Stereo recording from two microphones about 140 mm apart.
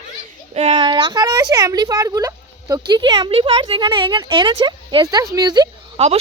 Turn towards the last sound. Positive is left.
turn(degrees=-45)  # may be behind; listen again after turning